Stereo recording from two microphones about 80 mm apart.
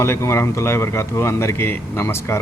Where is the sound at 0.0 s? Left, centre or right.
Left.